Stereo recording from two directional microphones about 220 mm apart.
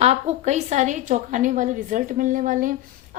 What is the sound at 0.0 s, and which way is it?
A woman's voice, 30° right (ahead or behind).